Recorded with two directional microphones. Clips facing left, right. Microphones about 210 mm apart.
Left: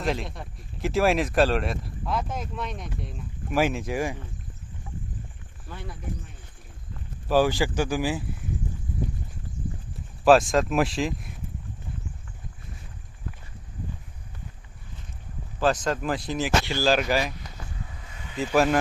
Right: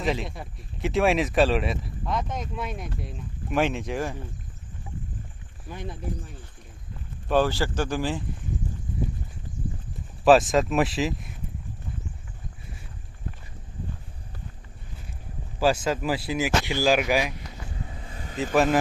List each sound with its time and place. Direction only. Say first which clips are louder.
0.0 s speech: right 1 dB; centre (ahead or behind)
5.6 s speech: right 3 dB; 20° right (ahead or behind)
7.3 s speech: left 1 dB; 10° left (ahead or behind)
10.2 s speech: even; centre (ahead or behind)
15.6 s speech: right 1 dB; 5° right (ahead or behind)
17.8 s vehicle: right 4 dB; 30° right (ahead or behind)
18.5 s speech: even; centre (ahead or behind)